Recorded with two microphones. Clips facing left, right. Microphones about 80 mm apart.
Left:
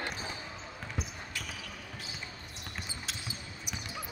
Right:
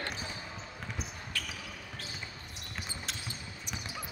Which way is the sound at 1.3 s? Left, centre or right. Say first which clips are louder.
Right 2 dB; centre.